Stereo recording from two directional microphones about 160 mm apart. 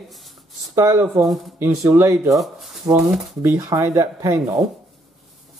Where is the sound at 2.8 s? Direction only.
20° right (ahead or behind).